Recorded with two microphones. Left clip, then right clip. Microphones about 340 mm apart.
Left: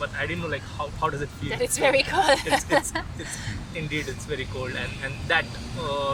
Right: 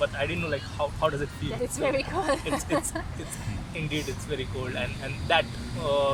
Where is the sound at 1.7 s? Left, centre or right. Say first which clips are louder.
Left 7 dB; left.